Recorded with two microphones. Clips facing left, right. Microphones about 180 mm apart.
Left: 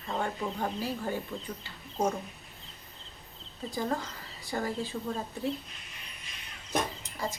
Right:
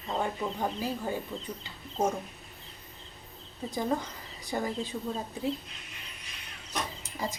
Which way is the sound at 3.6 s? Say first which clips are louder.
Right 2 dB; 20° right (ahead or behind).